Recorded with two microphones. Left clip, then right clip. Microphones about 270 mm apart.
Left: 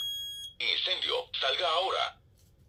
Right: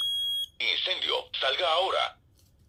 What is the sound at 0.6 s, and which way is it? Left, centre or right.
Speech, centre.